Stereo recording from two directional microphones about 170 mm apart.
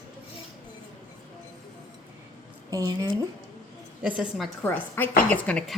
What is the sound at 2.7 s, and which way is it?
Speech, 20° right (ahead or behind).